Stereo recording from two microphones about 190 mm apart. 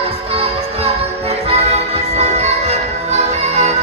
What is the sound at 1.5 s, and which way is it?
Music, 35° right (ahead or behind).